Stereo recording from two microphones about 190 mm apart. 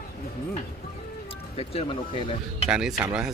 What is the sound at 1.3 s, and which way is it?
Speech, 30° left (ahead or behind).